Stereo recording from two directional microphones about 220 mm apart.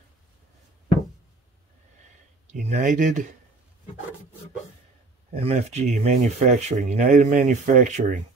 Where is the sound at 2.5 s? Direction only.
30° right (ahead or behind).